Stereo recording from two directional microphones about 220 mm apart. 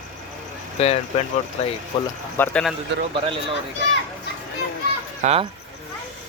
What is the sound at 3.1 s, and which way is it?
Speech, 25° right (ahead or behind).